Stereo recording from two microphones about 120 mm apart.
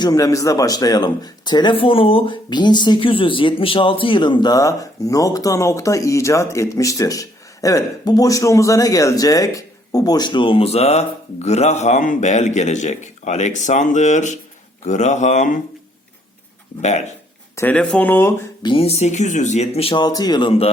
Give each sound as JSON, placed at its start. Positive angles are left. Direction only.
{"t": 0.0, "sound": "speech", "side_deg": 30}
{"t": 17.5, "sound": "speech", "side_deg": 20}
{"t": 18.6, "sound": "speech", "side_deg": 50}
{"t": 19.9, "sound": "speech", "side_deg": 35}